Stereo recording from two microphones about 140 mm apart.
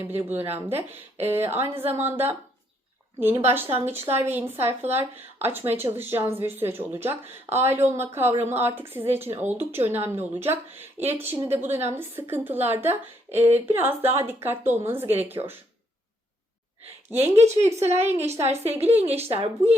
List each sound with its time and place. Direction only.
0.0 s speech: 15° right (ahead or behind)
17.3 s a woman's voice: 50° right (ahead or behind)